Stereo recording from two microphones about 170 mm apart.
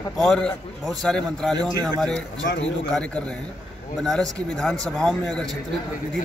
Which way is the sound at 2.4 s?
90° left.